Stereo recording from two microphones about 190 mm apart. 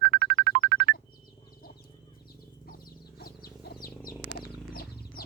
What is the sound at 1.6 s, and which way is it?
Wild animals, 50° left (ahead or behind).